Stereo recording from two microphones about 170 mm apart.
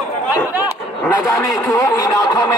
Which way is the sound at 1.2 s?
20° left (ahead or behind).